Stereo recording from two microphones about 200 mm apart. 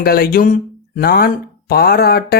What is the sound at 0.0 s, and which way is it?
Speech, 50° left (ahead or behind).